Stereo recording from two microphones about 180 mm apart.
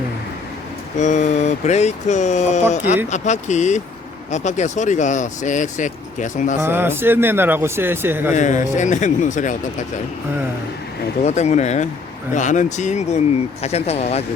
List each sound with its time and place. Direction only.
0.9 s speech: 40° left (ahead or behind)
6.6 s speech: 10° right (ahead or behind)
8.4 s speech: 40° left (ahead or behind)
11.2 s speech: 40° left (ahead or behind)